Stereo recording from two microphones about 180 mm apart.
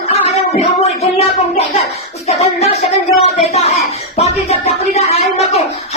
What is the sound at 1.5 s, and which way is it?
Speech, 35° left (ahead or behind).